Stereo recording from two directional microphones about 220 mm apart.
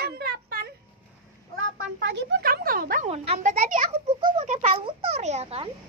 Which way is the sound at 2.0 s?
45° right (ahead or behind).